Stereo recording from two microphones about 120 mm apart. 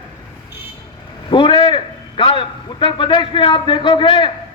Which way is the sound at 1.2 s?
45° left (ahead or behind).